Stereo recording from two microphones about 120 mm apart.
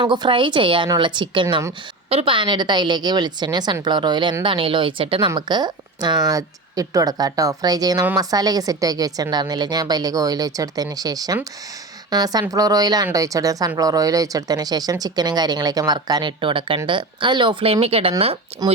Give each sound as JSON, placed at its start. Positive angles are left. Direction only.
{"t": 0.0, "sound": "a woman's voice", "side_deg": -40}